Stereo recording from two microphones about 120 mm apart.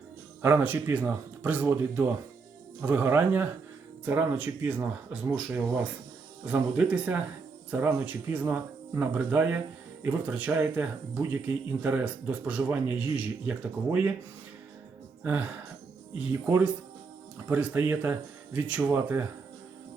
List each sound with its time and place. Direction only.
0.4 s speech: 15° right (ahead or behind)
15.2 s speech: 15° right (ahead or behind)